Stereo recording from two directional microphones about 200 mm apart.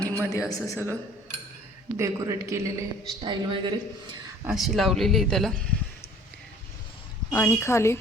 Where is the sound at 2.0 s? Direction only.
15° right (ahead or behind).